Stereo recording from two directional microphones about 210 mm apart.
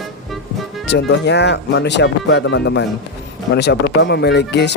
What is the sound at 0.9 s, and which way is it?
Speech, 55° left (ahead or behind).